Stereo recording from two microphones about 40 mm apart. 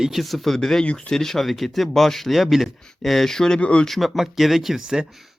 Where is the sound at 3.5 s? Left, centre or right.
Left.